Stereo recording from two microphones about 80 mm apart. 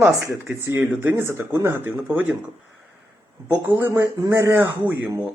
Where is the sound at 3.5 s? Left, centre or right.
Right.